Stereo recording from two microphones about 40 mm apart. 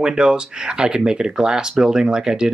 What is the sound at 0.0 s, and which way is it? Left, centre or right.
Speech, centre.